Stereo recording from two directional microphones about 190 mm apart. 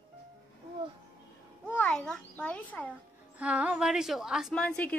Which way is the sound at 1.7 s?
5° left (ahead or behind).